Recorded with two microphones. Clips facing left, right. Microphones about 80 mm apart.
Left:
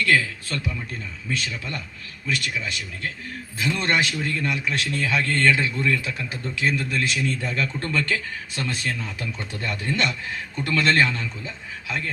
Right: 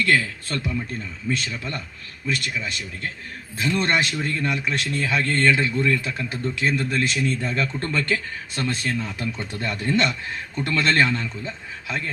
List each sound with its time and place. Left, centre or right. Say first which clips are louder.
0.0 s a man's voice: even; right
3.6 s a man's voice: right 1 dB; right